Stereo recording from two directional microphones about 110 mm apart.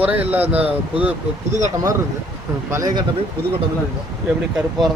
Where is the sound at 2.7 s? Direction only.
30° right (ahead or behind).